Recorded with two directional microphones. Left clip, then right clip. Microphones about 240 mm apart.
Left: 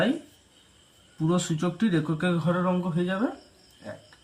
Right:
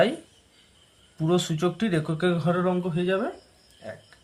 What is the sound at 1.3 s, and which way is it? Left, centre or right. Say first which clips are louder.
Speech: right 4 dB; right.